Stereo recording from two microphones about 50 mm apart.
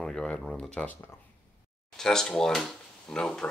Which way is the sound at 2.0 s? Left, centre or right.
Centre.